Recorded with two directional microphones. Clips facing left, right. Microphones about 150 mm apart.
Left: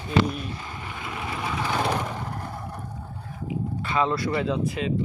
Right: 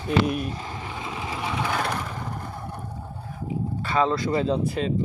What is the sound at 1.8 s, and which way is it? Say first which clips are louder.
Vehicle: left 3 dB; 15° left (ahead or behind).